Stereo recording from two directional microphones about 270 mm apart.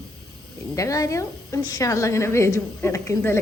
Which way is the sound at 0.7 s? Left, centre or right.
Centre.